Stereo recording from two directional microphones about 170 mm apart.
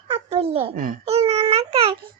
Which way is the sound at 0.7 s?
55° right (ahead or behind).